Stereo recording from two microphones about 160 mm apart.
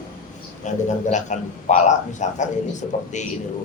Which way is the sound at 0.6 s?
50° left (ahead or behind).